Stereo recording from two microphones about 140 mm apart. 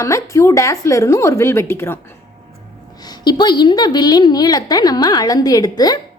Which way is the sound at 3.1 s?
30° left (ahead or behind).